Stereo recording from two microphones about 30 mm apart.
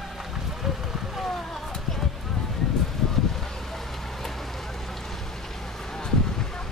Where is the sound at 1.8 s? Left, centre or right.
Centre.